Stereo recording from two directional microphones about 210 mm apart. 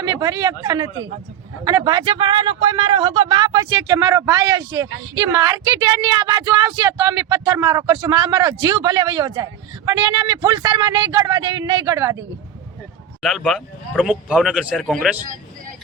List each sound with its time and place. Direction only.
0.0 s speech: 20° right (ahead or behind)
13.2 s speech: centre (ahead or behind)